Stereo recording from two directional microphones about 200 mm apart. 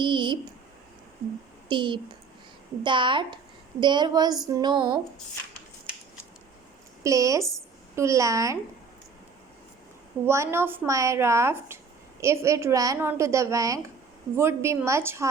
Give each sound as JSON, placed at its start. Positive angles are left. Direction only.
{"t": 0.0, "sound": "a sound", "side_deg": -25}
{"t": 1.6, "sound": "a woman's voice", "side_deg": -25}
{"t": 7.0, "sound": "a woman's voice", "side_deg": -15}
{"t": 10.2, "sound": "a woman's voice", "side_deg": -15}